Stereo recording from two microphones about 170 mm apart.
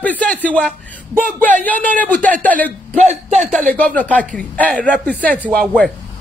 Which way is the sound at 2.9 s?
40° right (ahead or behind).